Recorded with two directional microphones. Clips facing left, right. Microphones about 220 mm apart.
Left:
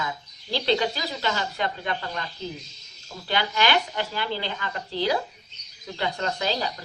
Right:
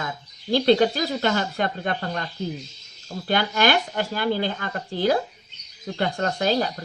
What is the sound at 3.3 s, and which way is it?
Speech, 50° right (ahead or behind).